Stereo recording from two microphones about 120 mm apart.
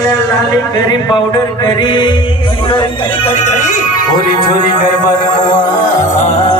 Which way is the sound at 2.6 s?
45° left (ahead or behind).